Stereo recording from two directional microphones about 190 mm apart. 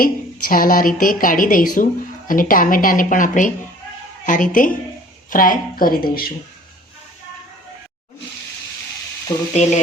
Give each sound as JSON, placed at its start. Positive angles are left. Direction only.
{"t": 0.0, "sound": "a woman's voice", "side_deg": 45}
{"t": 9.5, "sound": "frying", "side_deg": 35}